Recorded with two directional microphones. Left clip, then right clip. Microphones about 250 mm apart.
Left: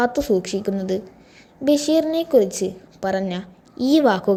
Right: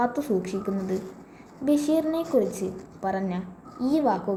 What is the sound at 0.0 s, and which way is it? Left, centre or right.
A woman's voice, left.